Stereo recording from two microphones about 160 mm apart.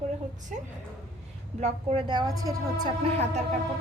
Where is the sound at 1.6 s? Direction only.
40° right (ahead or behind).